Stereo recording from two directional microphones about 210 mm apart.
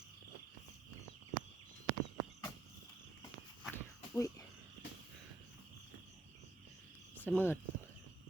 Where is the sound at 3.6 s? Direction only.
10° left (ahead or behind).